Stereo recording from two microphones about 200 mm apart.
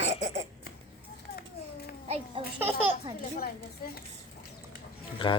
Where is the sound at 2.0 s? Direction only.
30° right (ahead or behind).